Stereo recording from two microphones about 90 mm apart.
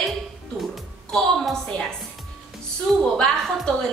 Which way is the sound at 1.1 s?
5° left (ahead or behind).